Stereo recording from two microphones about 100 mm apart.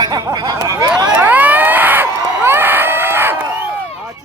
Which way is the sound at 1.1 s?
15° right (ahead or behind).